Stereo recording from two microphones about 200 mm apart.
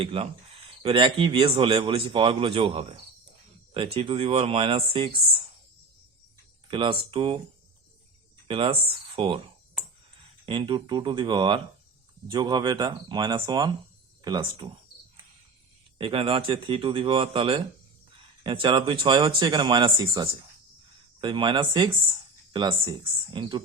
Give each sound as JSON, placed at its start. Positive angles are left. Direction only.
{"t": 0.0, "sound": "speech", "side_deg": -30}
{"t": 6.7, "sound": "speech", "side_deg": -25}
{"t": 8.4, "sound": "speech", "side_deg": -25}
{"t": 10.4, "sound": "speech", "side_deg": -25}
{"t": 16.0, "sound": "speech", "side_deg": -25}